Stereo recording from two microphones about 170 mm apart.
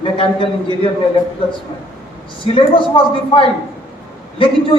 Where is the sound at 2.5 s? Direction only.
30° left (ahead or behind).